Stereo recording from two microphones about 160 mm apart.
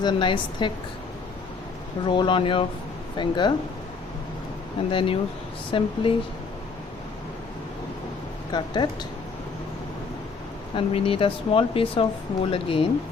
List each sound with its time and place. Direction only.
0.0 s a woman's voice: 30° left (ahead or behind)
2.0 s a woman's voice: 30° left (ahead or behind)
4.9 s speech: 35° left (ahead or behind)
8.5 s a woman's voice: 30° left (ahead or behind)
10.8 s speech: 35° left (ahead or behind)